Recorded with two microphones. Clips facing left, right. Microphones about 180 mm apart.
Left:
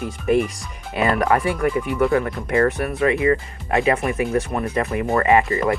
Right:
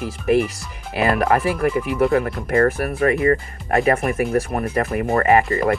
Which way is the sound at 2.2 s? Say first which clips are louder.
Right 1 dB; 40° right (ahead or behind).